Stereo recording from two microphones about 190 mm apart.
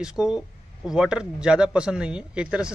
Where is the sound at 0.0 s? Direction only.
5° right (ahead or behind).